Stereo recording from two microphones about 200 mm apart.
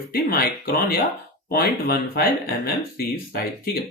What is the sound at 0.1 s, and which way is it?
Speech, 50° left (ahead or behind).